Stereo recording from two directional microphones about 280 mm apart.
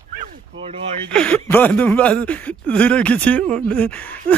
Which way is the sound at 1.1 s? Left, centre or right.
Centre.